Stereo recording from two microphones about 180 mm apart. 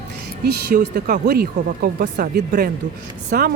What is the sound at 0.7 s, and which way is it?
Speech, 50° right (ahead or behind).